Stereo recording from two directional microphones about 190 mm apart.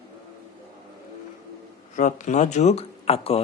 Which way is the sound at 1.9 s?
40° left (ahead or behind).